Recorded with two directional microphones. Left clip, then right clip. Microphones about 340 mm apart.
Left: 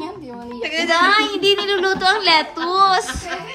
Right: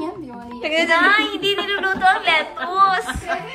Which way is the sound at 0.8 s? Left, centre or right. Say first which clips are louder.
Left 1 dB; centre.